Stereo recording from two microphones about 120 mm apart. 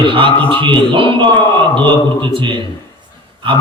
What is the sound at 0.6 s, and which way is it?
A man's voice, 45° right (ahead or behind).